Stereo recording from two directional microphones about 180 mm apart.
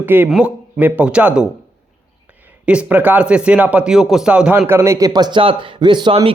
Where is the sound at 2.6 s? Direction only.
5° right (ahead or behind).